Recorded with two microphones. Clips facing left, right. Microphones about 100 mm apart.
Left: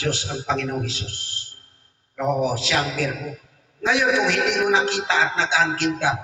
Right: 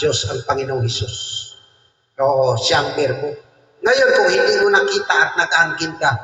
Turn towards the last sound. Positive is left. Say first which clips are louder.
# right 3 dB
turn(degrees=-20)  # may be behind; listen again after turning